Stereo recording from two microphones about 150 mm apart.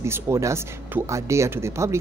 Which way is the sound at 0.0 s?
20° right (ahead or behind).